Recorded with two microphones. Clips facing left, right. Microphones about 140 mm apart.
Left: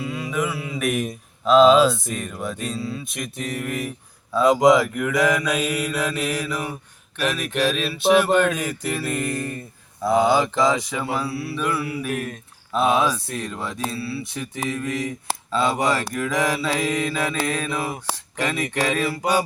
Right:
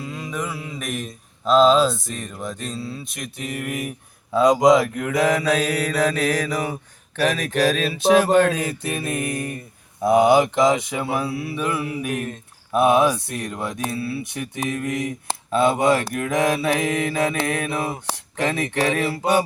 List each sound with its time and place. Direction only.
0.0 s mantra: 5° left (ahead or behind)
1.5 s speech: centre (ahead or behind)
4.3 s mantra: 20° right (ahead or behind)
18.9 s mantra: 25° right (ahead or behind)